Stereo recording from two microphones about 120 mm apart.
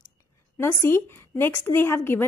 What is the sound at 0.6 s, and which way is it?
Speech, 20° left (ahead or behind).